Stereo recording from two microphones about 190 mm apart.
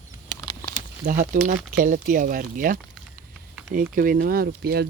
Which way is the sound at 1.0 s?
45° right (ahead or behind).